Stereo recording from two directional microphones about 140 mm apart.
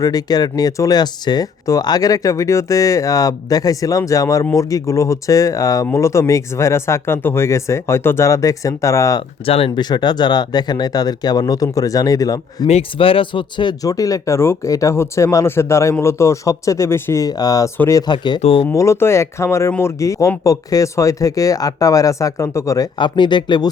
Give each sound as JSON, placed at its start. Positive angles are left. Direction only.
{"t": 0.0, "sound": "speech", "side_deg": 25}
{"t": 9.5, "sound": "speech", "side_deg": 40}
{"t": 12.6, "sound": "speech", "side_deg": 45}
{"t": 18.1, "sound": "speech", "side_deg": 35}
{"t": 18.6, "sound": "speech", "side_deg": 20}
{"t": 23.0, "sound": "speech", "side_deg": 35}